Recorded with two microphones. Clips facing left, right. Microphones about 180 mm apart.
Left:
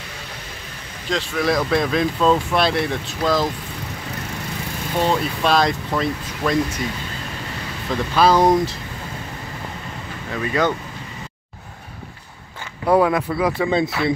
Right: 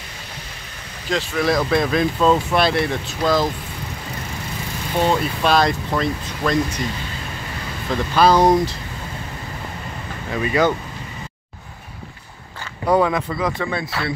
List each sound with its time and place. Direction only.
1.1 s speech: centre (ahead or behind)
4.9 s speech: centre (ahead or behind)
7.9 s speech: centre (ahead or behind)
10.3 s speech: 10° right (ahead or behind)
12.8 s speech: 5° left (ahead or behind)